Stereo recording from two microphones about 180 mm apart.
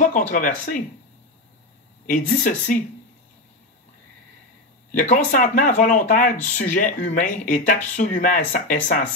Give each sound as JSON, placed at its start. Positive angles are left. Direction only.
{"t": 0.0, "sound": "speech", "side_deg": 45}
{"t": 2.0, "sound": "speech", "side_deg": 45}
{"t": 4.9, "sound": "speech", "side_deg": 45}